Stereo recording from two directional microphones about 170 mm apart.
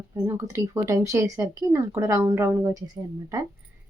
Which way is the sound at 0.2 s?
15° right (ahead or behind).